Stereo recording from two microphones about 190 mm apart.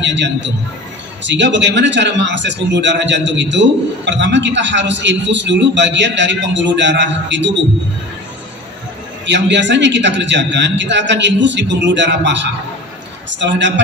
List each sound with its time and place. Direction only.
0.0 s a man's voice: 70° right (ahead or behind)
9.2 s a man's voice: 70° right (ahead or behind)